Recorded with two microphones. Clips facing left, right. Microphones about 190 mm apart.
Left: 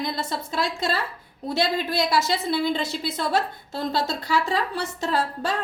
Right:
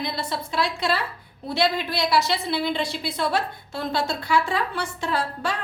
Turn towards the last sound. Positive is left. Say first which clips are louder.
# left 1 dB
turn(degrees=40)  # may be behind; listen again after turning